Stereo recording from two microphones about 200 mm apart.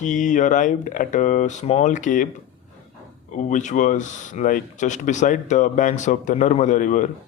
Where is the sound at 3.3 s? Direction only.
40° left (ahead or behind).